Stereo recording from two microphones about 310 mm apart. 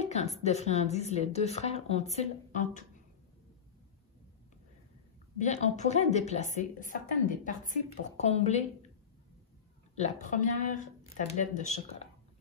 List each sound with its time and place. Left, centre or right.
0.0 s a sound: left
0.4 s a woman's voice: left
5.4 s a woman's voice: left
9.9 s a woman's voice: left